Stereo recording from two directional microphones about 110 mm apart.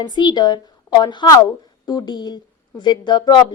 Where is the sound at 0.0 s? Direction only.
40° left (ahead or behind).